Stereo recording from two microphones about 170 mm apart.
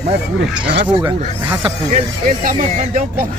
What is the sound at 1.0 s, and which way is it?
Speech, 15° right (ahead or behind).